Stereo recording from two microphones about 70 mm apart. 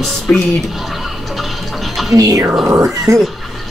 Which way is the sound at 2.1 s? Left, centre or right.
Right.